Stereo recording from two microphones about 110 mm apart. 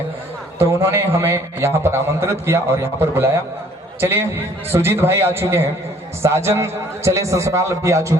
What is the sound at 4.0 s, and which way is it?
A man's voice, 20° right (ahead or behind).